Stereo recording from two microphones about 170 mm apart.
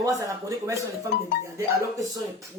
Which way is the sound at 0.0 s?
20° right (ahead or behind).